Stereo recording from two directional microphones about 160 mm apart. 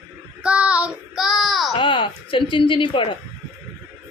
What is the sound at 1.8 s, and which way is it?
Speech, 30° left (ahead or behind).